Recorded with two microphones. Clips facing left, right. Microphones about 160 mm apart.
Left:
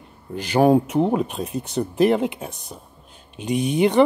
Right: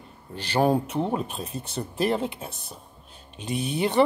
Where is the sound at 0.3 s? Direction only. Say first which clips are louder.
Left 6 dB; 10° left (ahead or behind).